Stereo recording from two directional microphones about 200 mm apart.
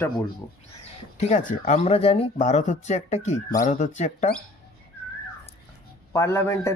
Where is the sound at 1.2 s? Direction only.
35° left (ahead or behind).